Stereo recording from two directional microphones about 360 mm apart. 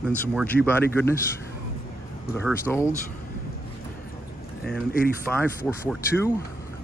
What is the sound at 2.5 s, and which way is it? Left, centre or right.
Speech, centre.